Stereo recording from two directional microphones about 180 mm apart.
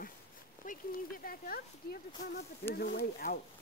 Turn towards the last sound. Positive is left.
turn(degrees=55)  # may be behind; listen again after turning